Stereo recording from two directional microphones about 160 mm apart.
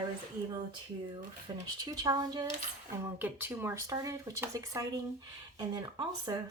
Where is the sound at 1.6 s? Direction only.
25° right (ahead or behind).